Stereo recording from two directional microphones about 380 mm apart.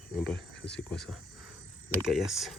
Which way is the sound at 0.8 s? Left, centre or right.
Centre.